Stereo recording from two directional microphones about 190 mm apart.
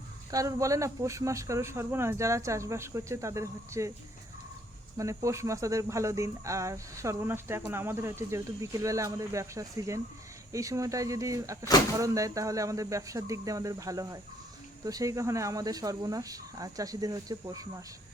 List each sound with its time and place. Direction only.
0.3 s speech: 20° right (ahead or behind)
4.9 s speech: 15° right (ahead or behind)